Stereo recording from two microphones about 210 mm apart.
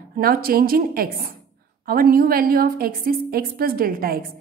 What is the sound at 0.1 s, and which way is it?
A woman's voice, 45° right (ahead or behind).